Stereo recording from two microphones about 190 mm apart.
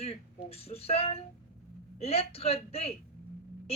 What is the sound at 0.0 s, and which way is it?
Speech, 30° left (ahead or behind).